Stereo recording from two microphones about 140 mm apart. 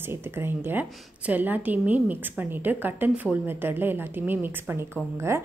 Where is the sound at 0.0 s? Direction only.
15° right (ahead or behind).